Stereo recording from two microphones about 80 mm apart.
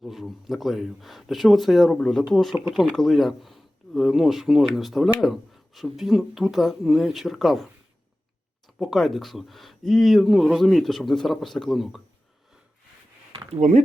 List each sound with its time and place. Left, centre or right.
0.0 s speech: centre